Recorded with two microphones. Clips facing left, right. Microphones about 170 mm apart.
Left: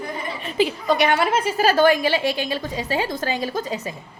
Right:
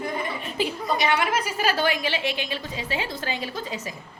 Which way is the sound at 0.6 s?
80° left.